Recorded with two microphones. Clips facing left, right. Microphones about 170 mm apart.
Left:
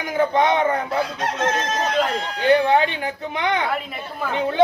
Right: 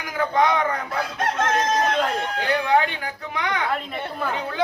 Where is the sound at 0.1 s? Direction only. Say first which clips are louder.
Left 2 dB; 25° left (ahead or behind).